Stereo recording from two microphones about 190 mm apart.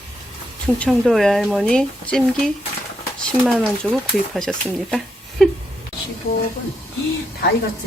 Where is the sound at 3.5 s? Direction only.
Centre (ahead or behind).